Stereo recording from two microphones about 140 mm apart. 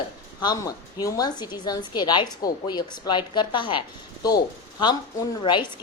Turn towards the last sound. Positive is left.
turn(degrees=35)  # may be behind; listen again after turning